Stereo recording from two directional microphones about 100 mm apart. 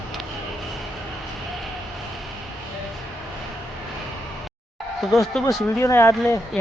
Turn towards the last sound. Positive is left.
turn(degrees=25)  # may be behind; listen again after turning